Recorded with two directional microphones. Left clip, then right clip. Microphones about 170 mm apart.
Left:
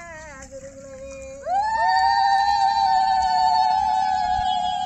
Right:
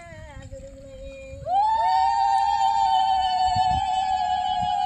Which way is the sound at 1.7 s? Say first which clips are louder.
Left 2 dB; 15° right (ahead or behind).